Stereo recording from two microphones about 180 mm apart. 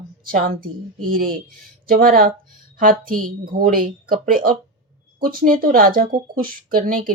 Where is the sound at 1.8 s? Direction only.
50° right (ahead or behind).